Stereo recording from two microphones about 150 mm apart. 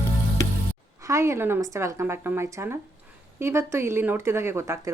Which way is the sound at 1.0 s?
20° right (ahead or behind).